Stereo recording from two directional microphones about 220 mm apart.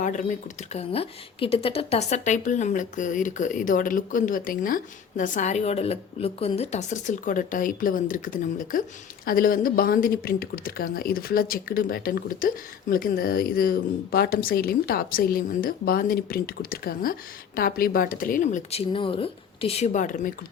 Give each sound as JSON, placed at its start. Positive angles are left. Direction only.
{"t": 0.0, "sound": "speech", "side_deg": 35}